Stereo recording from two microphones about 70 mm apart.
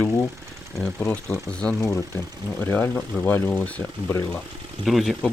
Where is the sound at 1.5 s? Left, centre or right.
Centre.